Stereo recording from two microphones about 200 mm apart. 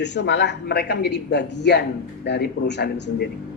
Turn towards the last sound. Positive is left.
turn(degrees=60)  # may be behind; listen again after turning